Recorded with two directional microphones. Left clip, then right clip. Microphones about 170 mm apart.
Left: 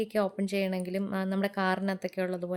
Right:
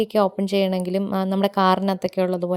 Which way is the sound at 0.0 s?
35° right (ahead or behind).